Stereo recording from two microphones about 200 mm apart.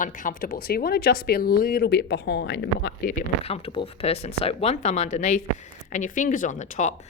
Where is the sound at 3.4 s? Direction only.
30° left (ahead or behind).